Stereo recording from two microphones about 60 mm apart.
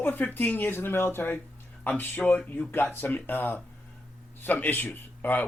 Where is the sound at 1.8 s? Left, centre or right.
Left.